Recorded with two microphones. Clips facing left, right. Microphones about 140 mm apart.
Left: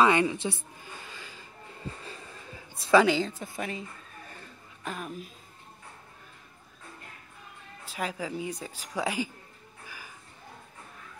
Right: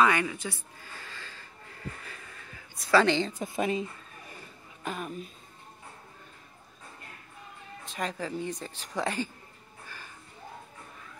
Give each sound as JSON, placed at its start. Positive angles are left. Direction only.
{"t": 0.0, "sound": "a sound", "side_deg": 25}
{"t": 3.0, "sound": "a woman's voice", "side_deg": 5}
{"t": 3.3, "sound": "a woman's voice", "side_deg": -20}
{"t": 4.8, "sound": "a woman's voice", "side_deg": 0}
{"t": 7.8, "sound": "speech", "side_deg": 5}
{"t": 9.8, "sound": "a sound", "side_deg": 10}